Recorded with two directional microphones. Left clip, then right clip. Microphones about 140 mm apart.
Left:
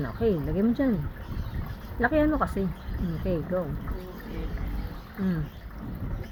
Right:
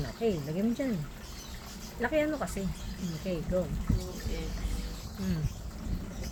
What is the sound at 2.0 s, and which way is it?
Speech, 50° left (ahead or behind).